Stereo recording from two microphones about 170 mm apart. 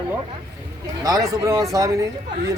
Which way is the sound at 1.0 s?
20° right (ahead or behind).